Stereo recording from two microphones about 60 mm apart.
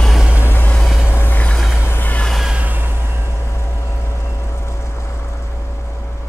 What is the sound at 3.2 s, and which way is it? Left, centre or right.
Vehicle, left.